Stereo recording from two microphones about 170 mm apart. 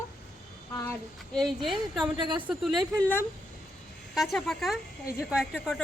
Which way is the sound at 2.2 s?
25° right (ahead or behind).